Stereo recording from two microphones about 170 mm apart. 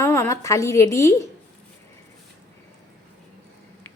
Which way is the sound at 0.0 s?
15° left (ahead or behind).